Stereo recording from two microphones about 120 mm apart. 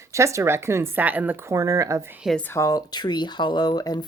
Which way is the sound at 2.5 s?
30° left (ahead or behind).